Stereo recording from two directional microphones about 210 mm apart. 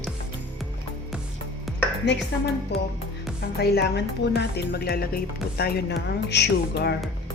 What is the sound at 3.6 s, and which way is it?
Speech, 50° left (ahead or behind).